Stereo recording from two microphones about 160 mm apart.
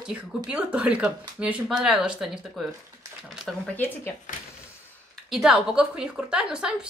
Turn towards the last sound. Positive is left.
turn(degrees=-5)  # may be behind; listen again after turning